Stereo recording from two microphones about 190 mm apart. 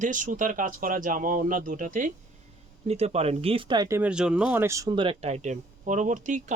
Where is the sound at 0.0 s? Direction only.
40° right (ahead or behind).